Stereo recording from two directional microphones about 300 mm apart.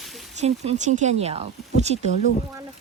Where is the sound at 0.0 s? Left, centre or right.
Centre.